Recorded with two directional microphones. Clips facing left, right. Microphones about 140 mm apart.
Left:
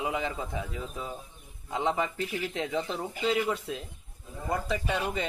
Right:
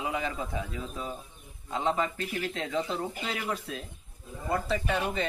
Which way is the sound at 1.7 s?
20° left (ahead or behind).